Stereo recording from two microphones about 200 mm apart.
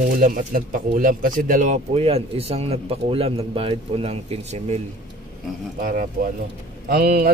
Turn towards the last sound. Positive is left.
turn(degrees=-45)  # may be behind; listen again after turning